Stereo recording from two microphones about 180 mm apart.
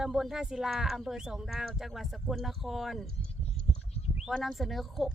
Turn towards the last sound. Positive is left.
turn(degrees=0)  # may be behind; listen again after turning